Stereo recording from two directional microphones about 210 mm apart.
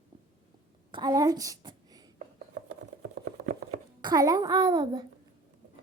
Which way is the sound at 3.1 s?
50° right (ahead or behind).